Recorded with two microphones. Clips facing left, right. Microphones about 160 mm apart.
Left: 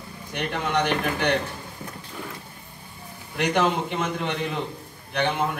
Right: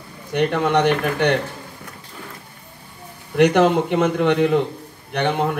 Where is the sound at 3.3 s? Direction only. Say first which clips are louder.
Right 8 dB; 60° right (ahead or behind).